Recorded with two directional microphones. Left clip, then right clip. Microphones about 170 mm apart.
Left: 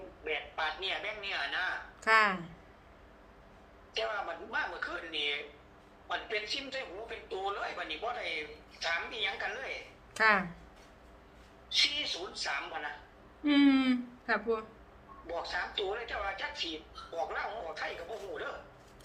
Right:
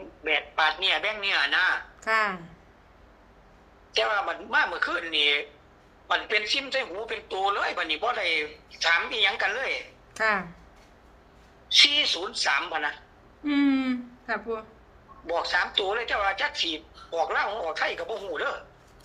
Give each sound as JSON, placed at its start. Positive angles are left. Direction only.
{"t": 0.3, "sound": "a man's voice", "side_deg": -70}
{"t": 2.0, "sound": "speech", "side_deg": 0}
{"t": 3.9, "sound": "a man's voice", "side_deg": -70}
{"t": 10.2, "sound": "speech", "side_deg": 0}
{"t": 11.8, "sound": "a man's voice", "side_deg": -70}
{"t": 13.4, "sound": "a sound", "side_deg": 0}
{"t": 15.3, "sound": "a man's voice", "side_deg": -70}